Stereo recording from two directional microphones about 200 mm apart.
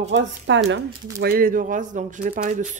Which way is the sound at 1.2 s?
50° right (ahead or behind).